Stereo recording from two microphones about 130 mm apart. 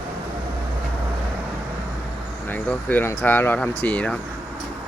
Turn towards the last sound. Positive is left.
turn(degrees=10)  # may be behind; listen again after turning